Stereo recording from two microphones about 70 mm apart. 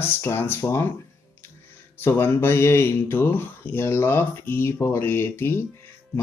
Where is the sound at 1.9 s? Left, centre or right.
Left.